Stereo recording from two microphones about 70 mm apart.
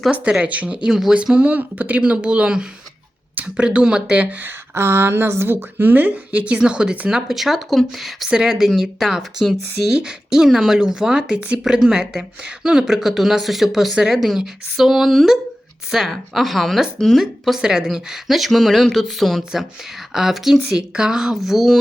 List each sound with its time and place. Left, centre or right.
0.1 s a woman's voice: centre
4.7 s speech: right; by 7.2 s centre
7.3 s a woman's voice: centre
19.4 s a woman's voice: centre